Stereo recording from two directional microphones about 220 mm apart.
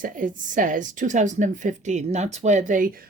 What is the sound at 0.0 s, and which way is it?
A woman's voice, 35° right (ahead or behind).